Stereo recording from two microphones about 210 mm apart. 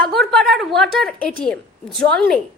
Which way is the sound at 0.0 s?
Centre (ahead or behind).